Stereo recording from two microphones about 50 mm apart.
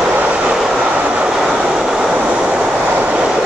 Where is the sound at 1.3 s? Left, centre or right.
Centre.